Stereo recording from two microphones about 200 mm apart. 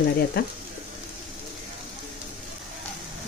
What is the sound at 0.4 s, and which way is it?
Speech, 50° left (ahead or behind).